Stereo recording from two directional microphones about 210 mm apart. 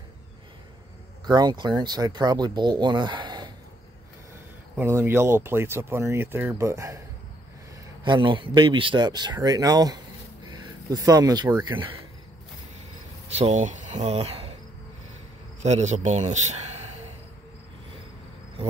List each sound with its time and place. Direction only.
1.2 s speech: 20° right (ahead or behind)
4.7 s speech: 10° right (ahead or behind)
8.0 s speech: 25° right (ahead or behind)
13.3 s speech: 30° right (ahead or behind)
15.6 s a man's voice: 35° right (ahead or behind)